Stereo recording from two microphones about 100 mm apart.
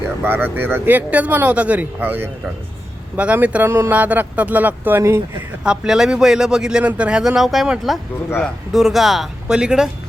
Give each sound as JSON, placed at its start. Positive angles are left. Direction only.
{"t": 0.2, "sound": "speech", "side_deg": -20}
{"t": 5.6, "sound": "speech", "side_deg": -5}